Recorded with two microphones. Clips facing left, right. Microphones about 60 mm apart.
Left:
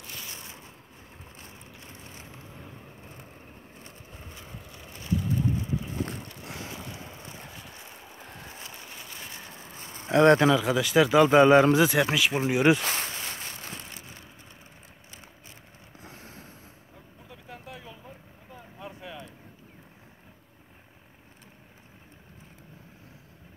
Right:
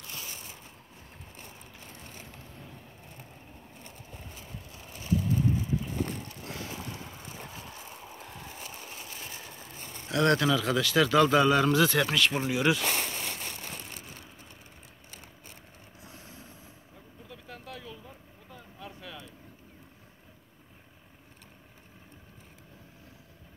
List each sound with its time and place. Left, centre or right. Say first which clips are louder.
10.0 s a man's voice: left 6 dB; left
10.6 s a man's voice: left 3 dB; centre
11.8 s speech: left 2 dB; centre
12.5 s a man's voice: left 7 dB; left
16.0 s a sound: left 3 dB; left
17.3 s a sound: left 1 dB; centre
18.5 s vehicle: left 3 dB; left